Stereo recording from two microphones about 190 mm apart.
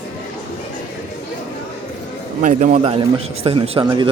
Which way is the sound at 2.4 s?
40° right (ahead or behind).